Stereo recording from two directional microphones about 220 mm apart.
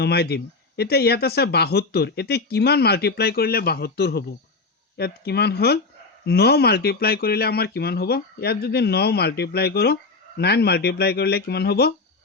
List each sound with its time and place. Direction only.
0.0 s speech: 45° left (ahead or behind)